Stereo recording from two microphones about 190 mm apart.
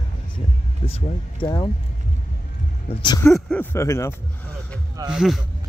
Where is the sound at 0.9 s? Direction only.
25° left (ahead or behind).